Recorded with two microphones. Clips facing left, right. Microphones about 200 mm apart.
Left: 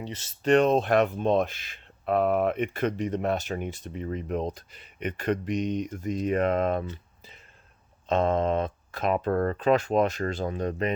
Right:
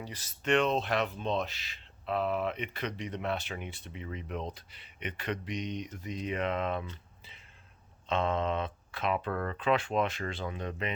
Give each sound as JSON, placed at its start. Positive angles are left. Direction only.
{"t": 0.0, "sound": "speech", "side_deg": 25}
{"t": 0.5, "sound": "speech", "side_deg": 45}
{"t": 8.0, "sound": "speech", "side_deg": 40}